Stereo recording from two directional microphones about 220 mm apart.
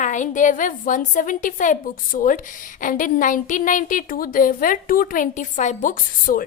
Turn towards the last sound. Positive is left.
turn(degrees=35)  # may be behind; listen again after turning